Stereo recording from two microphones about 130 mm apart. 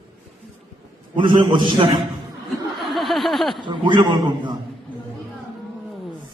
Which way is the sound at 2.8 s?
Centre (ahead or behind).